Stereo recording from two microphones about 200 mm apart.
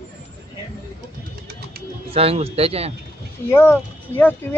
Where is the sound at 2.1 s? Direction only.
30° right (ahead or behind).